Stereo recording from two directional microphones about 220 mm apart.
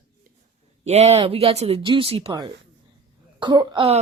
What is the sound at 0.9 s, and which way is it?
Speech, 30° right (ahead or behind).